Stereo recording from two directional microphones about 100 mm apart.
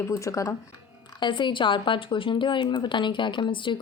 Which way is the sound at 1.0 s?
50° left (ahead or behind).